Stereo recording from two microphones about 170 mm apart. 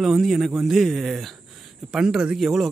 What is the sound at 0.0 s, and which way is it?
A man's voice, centre (ahead or behind).